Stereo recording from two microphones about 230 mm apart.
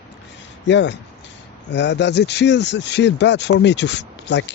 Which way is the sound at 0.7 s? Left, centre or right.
Left.